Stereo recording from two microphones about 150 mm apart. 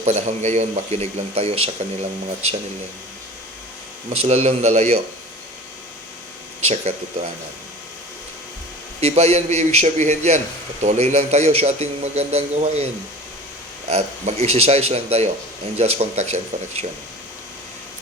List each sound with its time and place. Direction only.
0.0 s a man's voice: 45° right (ahead or behind)
4.2 s a man's voice: 45° right (ahead or behind)
6.6 s a man's voice: 45° right (ahead or behind)
9.0 s a man's voice: 45° right (ahead or behind)